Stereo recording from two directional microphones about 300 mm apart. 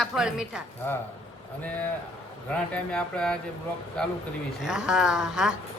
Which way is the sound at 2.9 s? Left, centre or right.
Centre.